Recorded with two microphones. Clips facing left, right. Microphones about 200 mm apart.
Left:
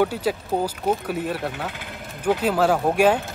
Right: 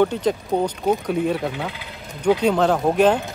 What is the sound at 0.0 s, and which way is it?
Speech, 5° left (ahead or behind).